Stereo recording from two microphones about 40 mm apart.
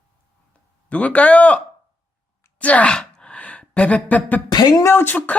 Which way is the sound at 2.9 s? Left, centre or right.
Left.